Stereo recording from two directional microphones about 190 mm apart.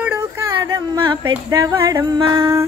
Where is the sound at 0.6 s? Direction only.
20° right (ahead or behind).